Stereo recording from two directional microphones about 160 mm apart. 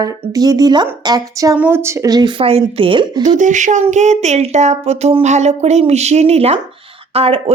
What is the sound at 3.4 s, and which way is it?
Speech, 50° right (ahead or behind).